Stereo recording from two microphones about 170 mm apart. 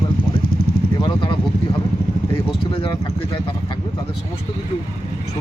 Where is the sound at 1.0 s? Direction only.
30° left (ahead or behind).